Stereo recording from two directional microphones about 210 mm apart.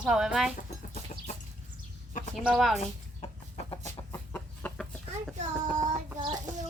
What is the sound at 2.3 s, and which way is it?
Speech, centre (ahead or behind).